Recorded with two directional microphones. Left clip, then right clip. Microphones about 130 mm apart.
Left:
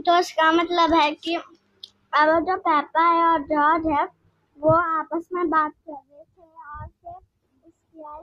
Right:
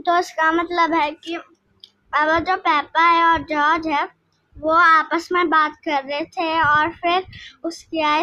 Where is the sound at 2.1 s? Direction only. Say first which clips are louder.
Right 1 dB; 5° right (ahead or behind).